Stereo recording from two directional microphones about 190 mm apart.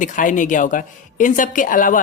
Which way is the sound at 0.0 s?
45° left (ahead or behind).